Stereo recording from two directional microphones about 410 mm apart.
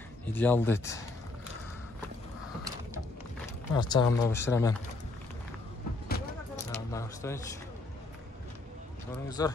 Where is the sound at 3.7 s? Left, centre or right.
Centre.